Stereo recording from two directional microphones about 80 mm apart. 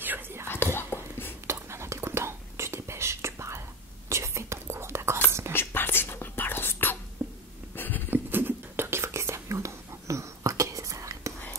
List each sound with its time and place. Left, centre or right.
0.0 s whispering: right
0.7 s whispering: left
1.5 s whispering: right
5.5 s whispering: left
7.2 s hiccup: right
7.7 s a sound: left
8.1 s whispering: right